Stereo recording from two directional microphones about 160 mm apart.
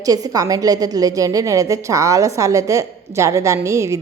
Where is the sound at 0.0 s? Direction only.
20° right (ahead or behind).